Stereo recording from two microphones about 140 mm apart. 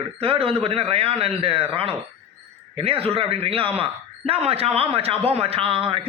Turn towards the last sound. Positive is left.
turn(degrees=-40)  # may be behind; listen again after turning